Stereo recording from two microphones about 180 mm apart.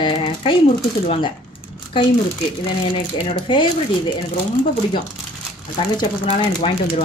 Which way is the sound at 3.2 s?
25° left (ahead or behind).